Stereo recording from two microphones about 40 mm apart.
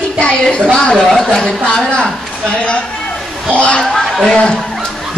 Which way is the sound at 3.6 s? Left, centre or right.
Left.